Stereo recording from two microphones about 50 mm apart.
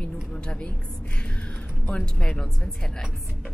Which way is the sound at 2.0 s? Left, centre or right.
Centre.